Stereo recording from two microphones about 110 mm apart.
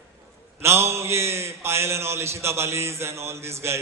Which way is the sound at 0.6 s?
25° right (ahead or behind).